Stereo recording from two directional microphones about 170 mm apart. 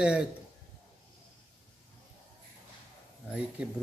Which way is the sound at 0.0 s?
5° right (ahead or behind).